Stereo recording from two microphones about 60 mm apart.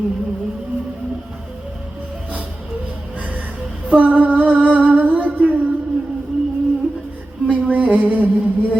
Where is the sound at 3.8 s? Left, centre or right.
Right.